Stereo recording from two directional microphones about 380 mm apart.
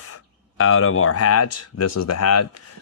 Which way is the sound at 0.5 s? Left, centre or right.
Left.